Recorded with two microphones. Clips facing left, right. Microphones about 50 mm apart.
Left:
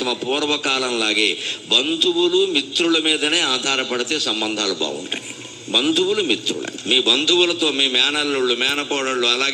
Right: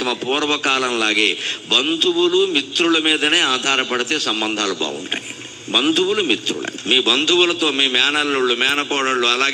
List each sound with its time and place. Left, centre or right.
0.0 s a man's voice: right